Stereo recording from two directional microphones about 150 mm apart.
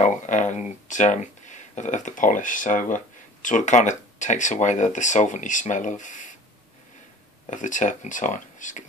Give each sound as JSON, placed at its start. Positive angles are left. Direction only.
{"t": 0.0, "sound": "speech", "side_deg": 55}
{"t": 7.4, "sound": "speech", "side_deg": 55}